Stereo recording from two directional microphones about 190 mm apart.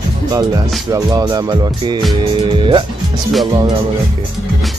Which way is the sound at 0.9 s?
20° right (ahead or behind).